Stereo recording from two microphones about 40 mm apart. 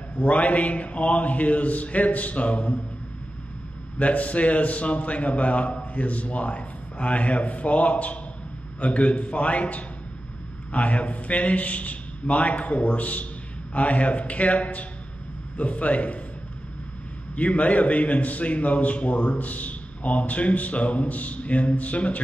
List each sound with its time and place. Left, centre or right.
0.2 s a man's voice: left
4.0 s a man's voice: left
17.4 s a man's voice: left